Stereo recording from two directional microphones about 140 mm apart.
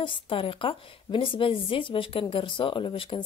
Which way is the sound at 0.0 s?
40° left (ahead or behind).